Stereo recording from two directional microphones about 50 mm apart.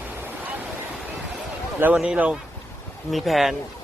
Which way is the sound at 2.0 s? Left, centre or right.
Right.